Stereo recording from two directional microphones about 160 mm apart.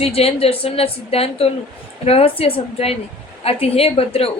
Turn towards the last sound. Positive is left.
turn(degrees=40)  # may be behind; listen again after turning